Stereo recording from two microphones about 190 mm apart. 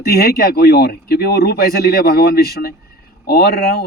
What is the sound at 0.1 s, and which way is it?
Speech, 55° left (ahead or behind).